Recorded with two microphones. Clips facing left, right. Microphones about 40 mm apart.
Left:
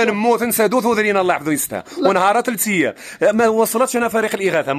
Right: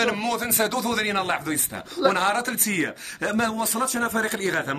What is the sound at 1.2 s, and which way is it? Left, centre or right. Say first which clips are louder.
Speech: left 8 dB; left.